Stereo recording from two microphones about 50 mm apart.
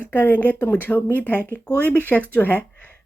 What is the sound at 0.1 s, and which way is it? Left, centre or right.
Speech, left.